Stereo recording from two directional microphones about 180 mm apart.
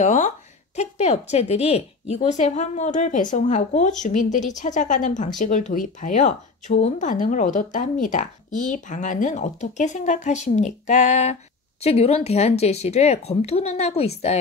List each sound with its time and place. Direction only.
0.0 s a woman's voice: 40° left (ahead or behind)